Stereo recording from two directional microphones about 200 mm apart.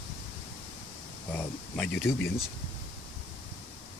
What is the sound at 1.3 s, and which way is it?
Speech, 10° left (ahead or behind).